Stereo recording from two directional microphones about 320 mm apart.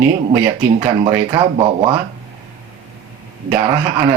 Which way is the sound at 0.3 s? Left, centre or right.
Centre.